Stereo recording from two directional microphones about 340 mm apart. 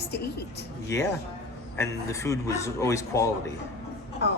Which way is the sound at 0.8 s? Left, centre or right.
Centre.